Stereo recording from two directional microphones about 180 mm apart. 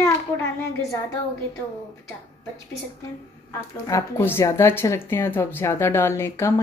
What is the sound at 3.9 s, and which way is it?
Speech, 15° left (ahead or behind).